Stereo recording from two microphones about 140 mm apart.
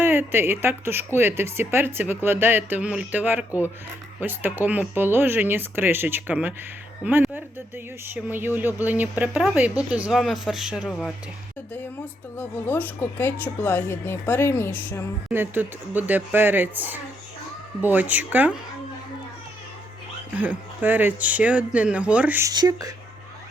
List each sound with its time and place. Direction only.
0.0 s a woman's voice: 15° right (ahead or behind)
12.4 s speech: 15° left (ahead or behind)
15.3 s a woman's voice: 15° right (ahead or behind)
20.3 s a woman's voice: 10° right (ahead or behind)
22.4 s speech: 25° right (ahead or behind)